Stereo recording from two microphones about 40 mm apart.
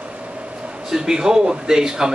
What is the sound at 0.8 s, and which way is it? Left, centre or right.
Speech, centre.